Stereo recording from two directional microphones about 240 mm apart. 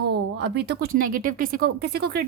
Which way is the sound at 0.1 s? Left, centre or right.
Right.